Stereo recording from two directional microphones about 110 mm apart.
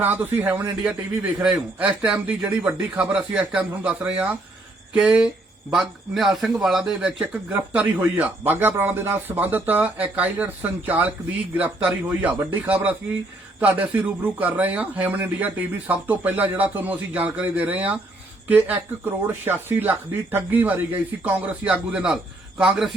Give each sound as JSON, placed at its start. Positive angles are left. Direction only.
{"t": 0.0, "sound": "speech", "side_deg": -20}